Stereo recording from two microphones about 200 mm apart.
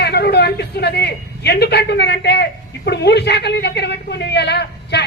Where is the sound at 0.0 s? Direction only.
55° left (ahead or behind).